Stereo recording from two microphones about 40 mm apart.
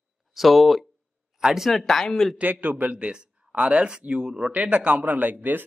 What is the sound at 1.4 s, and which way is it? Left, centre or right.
Speech, centre.